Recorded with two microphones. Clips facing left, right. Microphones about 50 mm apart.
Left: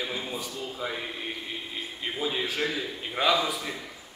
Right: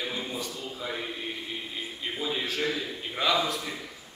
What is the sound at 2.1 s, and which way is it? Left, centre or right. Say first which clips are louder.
A man's voice: left 1 dB; centre.